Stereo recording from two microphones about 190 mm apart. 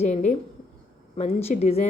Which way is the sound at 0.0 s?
35° left (ahead or behind).